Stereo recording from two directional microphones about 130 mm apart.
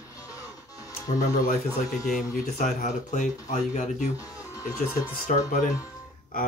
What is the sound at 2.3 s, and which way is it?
Speech, 80° left.